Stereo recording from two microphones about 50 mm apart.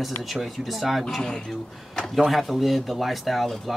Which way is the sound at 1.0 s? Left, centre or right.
Centre.